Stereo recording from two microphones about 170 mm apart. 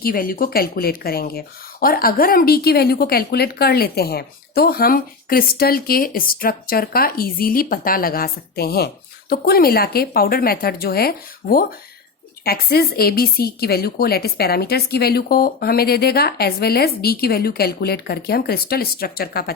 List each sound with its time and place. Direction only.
0.0 s speech: 55° left (ahead or behind)